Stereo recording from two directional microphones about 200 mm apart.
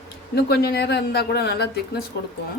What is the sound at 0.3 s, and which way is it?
Speech, 50° left (ahead or behind).